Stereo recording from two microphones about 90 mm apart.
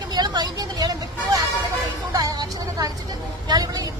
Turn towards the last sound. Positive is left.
turn(degrees=-45)  # may be behind; listen again after turning